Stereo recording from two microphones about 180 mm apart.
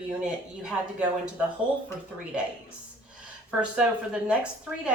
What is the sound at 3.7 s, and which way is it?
Speech, 5° right (ahead or behind).